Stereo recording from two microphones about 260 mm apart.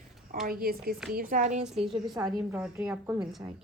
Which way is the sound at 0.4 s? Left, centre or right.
Right.